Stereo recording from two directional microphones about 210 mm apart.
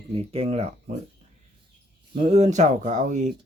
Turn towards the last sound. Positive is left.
turn(degrees=-35)  # may be behind; listen again after turning